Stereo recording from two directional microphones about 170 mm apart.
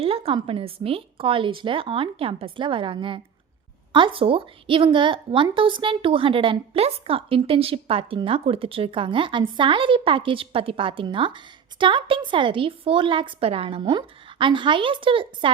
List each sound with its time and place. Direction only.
0.0 s a woman's voice: 35° right (ahead or behind)